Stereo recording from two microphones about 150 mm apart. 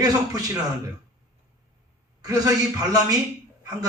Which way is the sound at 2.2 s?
25° right (ahead or behind).